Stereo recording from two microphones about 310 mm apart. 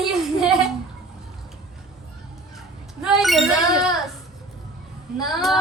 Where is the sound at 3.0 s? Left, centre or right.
Centre.